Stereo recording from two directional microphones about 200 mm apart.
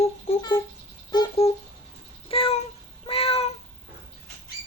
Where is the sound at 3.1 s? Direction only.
30° left (ahead or behind).